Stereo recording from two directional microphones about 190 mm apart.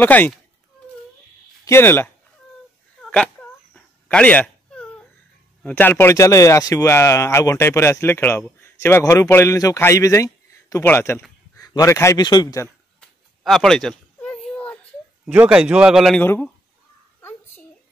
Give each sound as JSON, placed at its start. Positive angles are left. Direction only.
{"t": 0.0, "sound": "speech", "side_deg": 10}
{"t": 1.6, "sound": "speech", "side_deg": 15}
{"t": 3.0, "sound": "dog", "side_deg": 5}
{"t": 5.6, "sound": "speech", "side_deg": 10}
{"t": 13.4, "sound": "a sound", "side_deg": 0}
{"t": 15.2, "sound": "a man's voice", "side_deg": -5}
{"t": 17.2, "sound": "a sound", "side_deg": 10}